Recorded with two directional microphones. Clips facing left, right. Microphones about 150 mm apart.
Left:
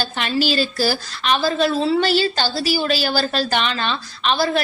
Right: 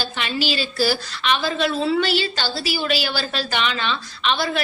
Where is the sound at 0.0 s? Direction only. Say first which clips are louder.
Left 4 dB; 45° left (ahead or behind).